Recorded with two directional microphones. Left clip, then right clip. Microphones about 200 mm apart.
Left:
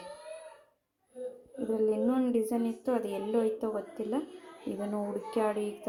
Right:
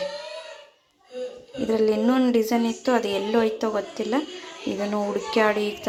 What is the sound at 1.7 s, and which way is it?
A woman's voice, centre (ahead or behind).